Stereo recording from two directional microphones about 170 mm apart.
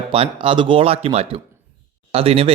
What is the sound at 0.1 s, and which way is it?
Speech, 30° right (ahead or behind).